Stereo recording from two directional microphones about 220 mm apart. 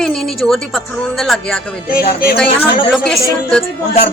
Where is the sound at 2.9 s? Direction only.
Centre (ahead or behind).